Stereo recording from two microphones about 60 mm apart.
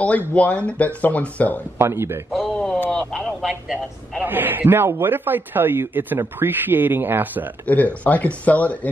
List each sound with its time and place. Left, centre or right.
0.3 s speech: left
1.8 s speech: right
2.5 s a sound: centre
2.9 s a sound: centre
3.3 s speech: centre
4.2 s a man's voice: right
7.6 s speech: left